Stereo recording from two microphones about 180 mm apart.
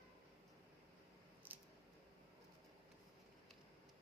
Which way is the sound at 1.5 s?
10° right (ahead or behind).